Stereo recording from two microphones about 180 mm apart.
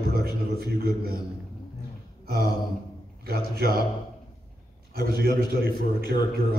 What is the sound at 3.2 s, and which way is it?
Speech, 60° right (ahead or behind).